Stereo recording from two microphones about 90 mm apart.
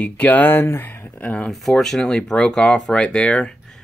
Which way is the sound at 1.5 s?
5° left (ahead or behind).